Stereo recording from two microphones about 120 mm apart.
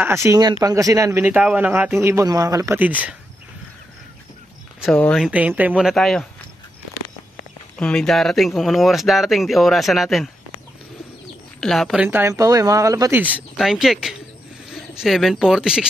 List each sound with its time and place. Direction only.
0.0 s speech: 20° right (ahead or behind)
2.8 s speech: 15° right (ahead or behind)
4.9 s speech: 10° left (ahead or behind)
5.2 s speech: 10° right (ahead or behind)
7.7 s speech: 10° left (ahead or behind)
11.6 s speech: centre (ahead or behind)
12.0 s speech: 20° right (ahead or behind)
13.6 s speech: centre (ahead or behind)